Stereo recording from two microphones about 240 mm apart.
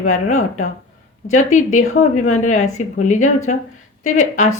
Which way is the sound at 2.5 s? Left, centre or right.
Left.